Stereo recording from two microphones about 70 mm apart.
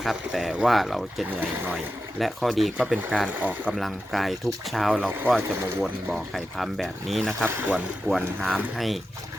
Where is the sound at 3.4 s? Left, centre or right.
Right.